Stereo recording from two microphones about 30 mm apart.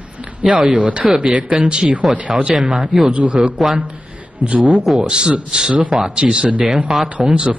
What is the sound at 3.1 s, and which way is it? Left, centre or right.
Speech, right.